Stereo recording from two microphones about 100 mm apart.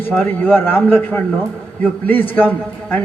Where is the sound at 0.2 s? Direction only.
20° left (ahead or behind).